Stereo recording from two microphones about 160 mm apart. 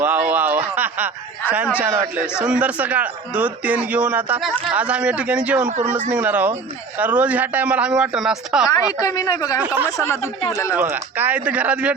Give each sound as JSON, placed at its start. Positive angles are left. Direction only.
{"t": 0.0, "sound": "a sound", "side_deg": -10}
{"t": 1.5, "sound": "a man's voice", "side_deg": -10}
{"t": 2.4, "sound": "a man's voice", "side_deg": -5}
{"t": 5.6, "sound": "speech", "side_deg": -50}
{"t": 6.1, "sound": "a man's voice", "side_deg": -10}
{"t": 8.6, "sound": "a woman's voice", "side_deg": 20}
{"t": 9.6, "sound": "a man's voice", "side_deg": -10}